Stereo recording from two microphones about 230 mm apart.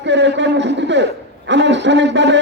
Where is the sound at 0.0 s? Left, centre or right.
Right.